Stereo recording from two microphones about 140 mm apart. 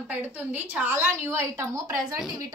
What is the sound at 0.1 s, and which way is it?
A woman's voice, 10° right (ahead or behind).